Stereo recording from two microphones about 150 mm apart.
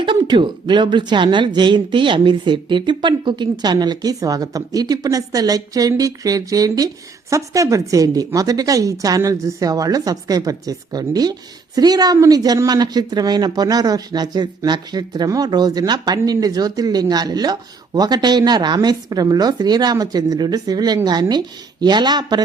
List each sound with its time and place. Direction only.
0.0 s speech: 35° right (ahead or behind)